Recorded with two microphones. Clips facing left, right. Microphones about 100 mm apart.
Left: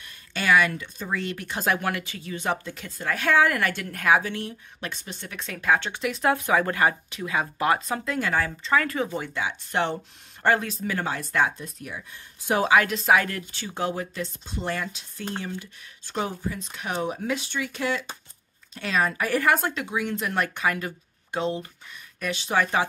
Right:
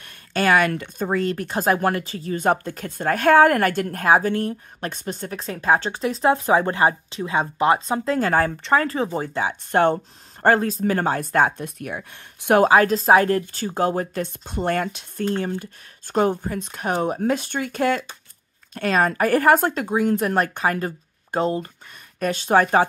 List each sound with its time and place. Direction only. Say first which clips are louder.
0.0 s speech: right 7 dB; 45° right (ahead or behind)
8.7 s speech: right 3 dB; 30° right (ahead or behind); by 12.6 s 60° right (ahead or behind)
12.6 s speech: right 2 dB; 35° right (ahead or behind)